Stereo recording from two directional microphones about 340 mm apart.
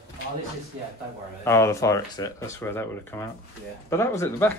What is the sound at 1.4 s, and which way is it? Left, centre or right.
A man's voice, centre.